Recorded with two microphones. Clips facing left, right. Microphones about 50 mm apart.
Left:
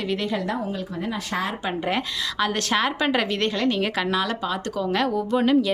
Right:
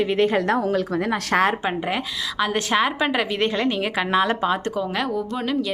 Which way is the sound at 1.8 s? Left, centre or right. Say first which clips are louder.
Even; centre.